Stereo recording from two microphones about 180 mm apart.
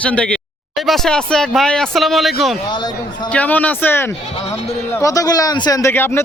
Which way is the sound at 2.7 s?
25° left (ahead or behind).